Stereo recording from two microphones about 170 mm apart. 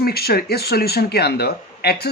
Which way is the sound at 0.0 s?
65° left (ahead or behind).